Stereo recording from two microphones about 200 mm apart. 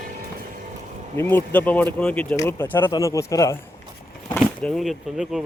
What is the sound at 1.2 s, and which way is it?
Speech, 10° left (ahead or behind).